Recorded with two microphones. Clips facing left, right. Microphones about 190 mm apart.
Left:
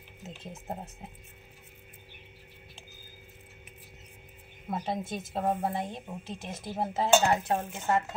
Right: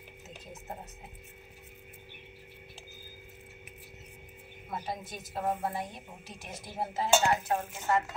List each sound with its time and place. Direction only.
4.6 s a woman's voice: 25° left (ahead or behind)